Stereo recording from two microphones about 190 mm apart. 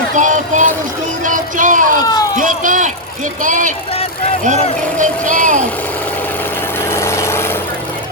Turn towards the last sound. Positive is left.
turn(degrees=15)  # may be behind; listen again after turning